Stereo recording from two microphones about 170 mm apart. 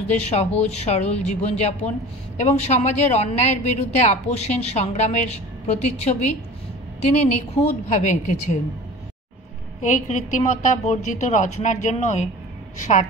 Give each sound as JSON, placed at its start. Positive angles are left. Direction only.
{"t": 0.1, "sound": "a woman's voice", "side_deg": 40}
{"t": 9.8, "sound": "a woman's voice", "side_deg": 45}